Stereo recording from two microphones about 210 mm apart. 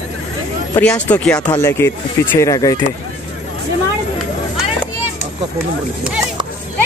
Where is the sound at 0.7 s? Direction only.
5° left (ahead or behind).